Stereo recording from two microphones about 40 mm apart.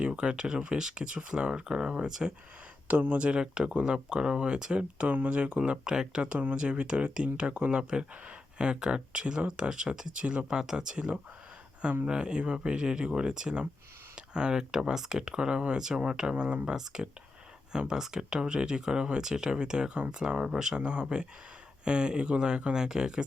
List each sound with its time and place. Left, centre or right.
0.2 s speech: right
7.8 s speech: right
16.3 s speech: right
16.7 s speech: centre